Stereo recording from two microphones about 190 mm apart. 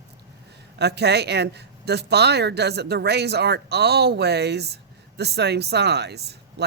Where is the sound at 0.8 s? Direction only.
60° right (ahead or behind).